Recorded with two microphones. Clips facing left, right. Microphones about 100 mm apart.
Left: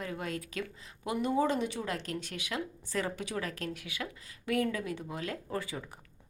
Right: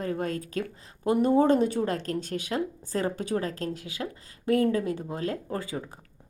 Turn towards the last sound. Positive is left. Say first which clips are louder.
# right 4 dB
turn(degrees=-35)  # may be behind; listen again after turning